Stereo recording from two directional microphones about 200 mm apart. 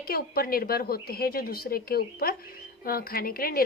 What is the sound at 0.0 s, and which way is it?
A woman's voice, 50° left (ahead or behind).